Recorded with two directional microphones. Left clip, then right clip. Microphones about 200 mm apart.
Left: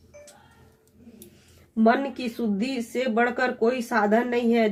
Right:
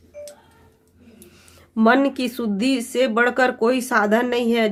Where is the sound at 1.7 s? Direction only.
30° right (ahead or behind).